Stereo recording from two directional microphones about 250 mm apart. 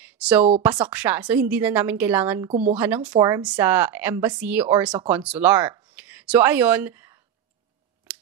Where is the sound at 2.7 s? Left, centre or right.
Centre.